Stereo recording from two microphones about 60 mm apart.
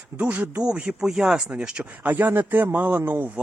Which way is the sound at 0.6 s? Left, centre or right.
Centre.